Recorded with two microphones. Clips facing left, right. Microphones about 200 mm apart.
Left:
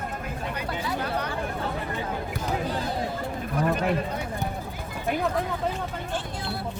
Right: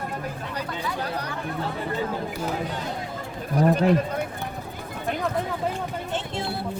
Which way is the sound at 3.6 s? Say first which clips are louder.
Right 6 dB; 35° right (ahead or behind).